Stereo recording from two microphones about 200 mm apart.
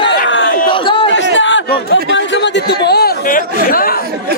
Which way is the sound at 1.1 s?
70° left (ahead or behind).